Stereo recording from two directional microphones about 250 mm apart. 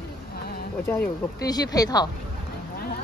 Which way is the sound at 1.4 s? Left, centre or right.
Centre.